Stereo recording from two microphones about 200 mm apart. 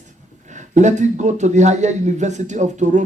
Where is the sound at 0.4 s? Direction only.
35° right (ahead or behind).